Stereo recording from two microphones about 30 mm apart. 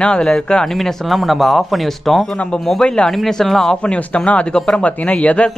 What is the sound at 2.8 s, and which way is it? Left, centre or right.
Speech, left.